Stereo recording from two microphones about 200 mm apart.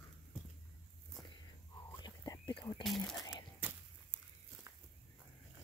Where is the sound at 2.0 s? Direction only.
20° left (ahead or behind).